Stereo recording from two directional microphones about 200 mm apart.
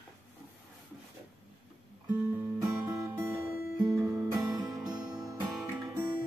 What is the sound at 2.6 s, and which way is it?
Music, 15° right (ahead or behind).